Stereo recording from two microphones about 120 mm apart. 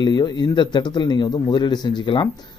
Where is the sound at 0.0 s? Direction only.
40° left (ahead or behind).